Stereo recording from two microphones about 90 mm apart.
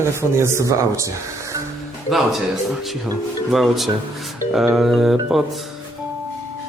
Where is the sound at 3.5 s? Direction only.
Centre (ahead or behind).